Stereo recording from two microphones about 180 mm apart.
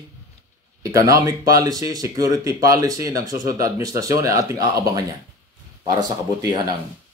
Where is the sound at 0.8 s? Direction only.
20° right (ahead or behind).